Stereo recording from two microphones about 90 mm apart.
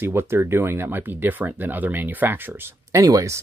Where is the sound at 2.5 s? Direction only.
35° right (ahead or behind).